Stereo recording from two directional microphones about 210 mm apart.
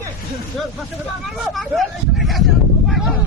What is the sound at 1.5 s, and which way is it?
Speech, centre (ahead or behind).